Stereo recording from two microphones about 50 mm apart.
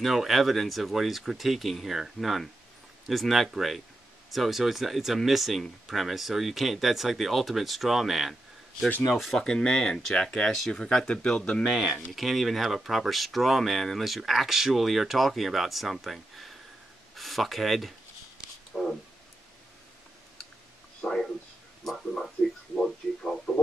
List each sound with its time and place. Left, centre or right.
0.0 s speech: centre
9.4 s speech: centre
12.1 s speech: centre
21.0 s a sound: centre